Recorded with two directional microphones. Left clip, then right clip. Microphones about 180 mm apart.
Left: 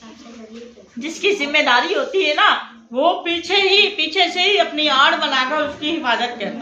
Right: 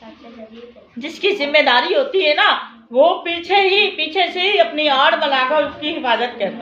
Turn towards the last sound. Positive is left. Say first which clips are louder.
# right 1 dB
turn(degrees=-50)  # may be behind; listen again after turning